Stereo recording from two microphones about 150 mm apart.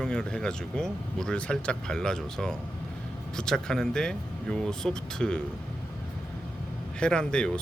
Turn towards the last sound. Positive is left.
turn(degrees=5)  # may be behind; listen again after turning